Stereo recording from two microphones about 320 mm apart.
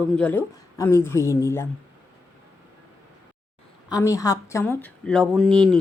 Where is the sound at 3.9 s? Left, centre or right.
Centre.